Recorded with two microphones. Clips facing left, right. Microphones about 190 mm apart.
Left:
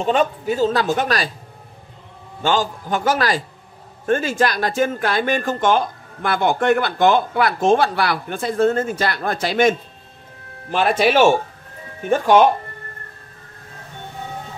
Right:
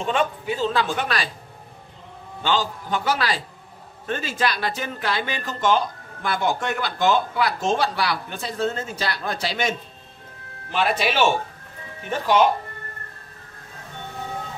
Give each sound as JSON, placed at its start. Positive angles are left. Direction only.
{"t": 0.0, "sound": "a man's voice", "side_deg": 40}
{"t": 2.4, "sound": "speech", "side_deg": 45}